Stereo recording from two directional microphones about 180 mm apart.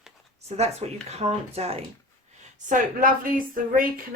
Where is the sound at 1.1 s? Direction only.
35° right (ahead or behind).